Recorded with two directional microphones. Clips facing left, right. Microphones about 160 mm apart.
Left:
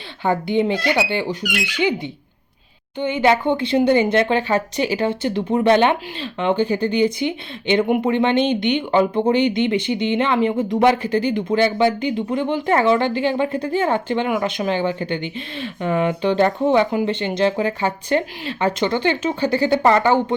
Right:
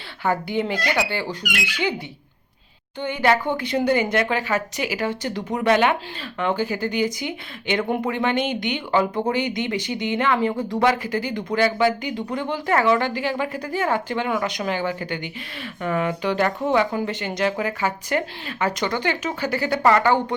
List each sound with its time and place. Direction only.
0.3 s speech: 20° left (ahead or behind)
3.0 s speech: 20° left (ahead or behind)